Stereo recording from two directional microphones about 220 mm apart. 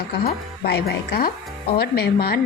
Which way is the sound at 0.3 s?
45° left (ahead or behind).